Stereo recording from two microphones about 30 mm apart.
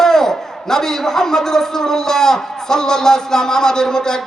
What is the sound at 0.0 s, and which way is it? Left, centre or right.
A man's voice, centre.